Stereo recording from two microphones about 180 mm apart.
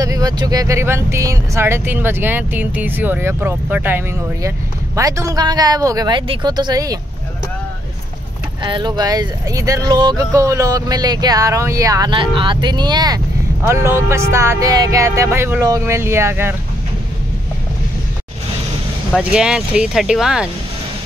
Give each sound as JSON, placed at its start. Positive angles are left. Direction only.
{"t": 0.0, "sound": "speech", "side_deg": -20}
{"t": 8.6, "sound": "speech", "side_deg": -25}
{"t": 19.1, "sound": "speech", "side_deg": -5}